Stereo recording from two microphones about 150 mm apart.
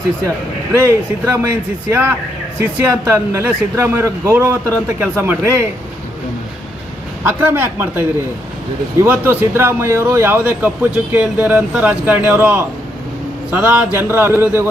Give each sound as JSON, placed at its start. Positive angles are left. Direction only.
{"t": 0.9, "sound": "speech", "side_deg": -15}
{"t": 7.3, "sound": "speech", "side_deg": -15}
{"t": 9.0, "sound": "speech", "side_deg": -15}